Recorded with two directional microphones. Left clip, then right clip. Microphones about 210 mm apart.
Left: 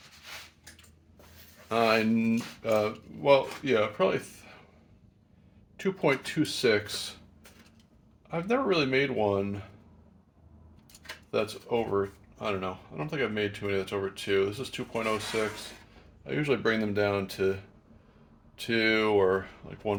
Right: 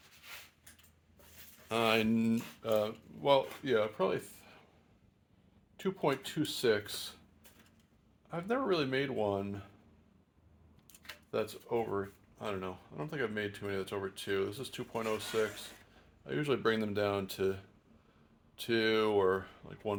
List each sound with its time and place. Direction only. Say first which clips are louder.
1.7 s speech: left 5 dB; 45° right (ahead or behind)
2.2 s speech: left 5 dB; 35° right (ahead or behind)
5.7 s speech: left 6 dB; 30° right (ahead or behind)
8.3 s speech: left 6 dB; 30° right (ahead or behind)
11.0 s speech: left 6 dB; 30° right (ahead or behind)
16.2 s speech: left 5 dB; 35° right (ahead or behind)